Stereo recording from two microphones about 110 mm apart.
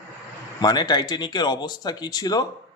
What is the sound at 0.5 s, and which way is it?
Speech, 40° left (ahead or behind).